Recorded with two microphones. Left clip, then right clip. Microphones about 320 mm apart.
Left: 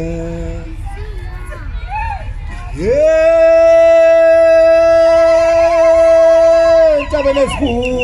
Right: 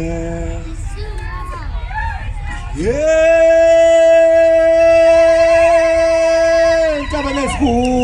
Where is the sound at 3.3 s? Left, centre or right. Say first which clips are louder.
Left 2 dB; centre.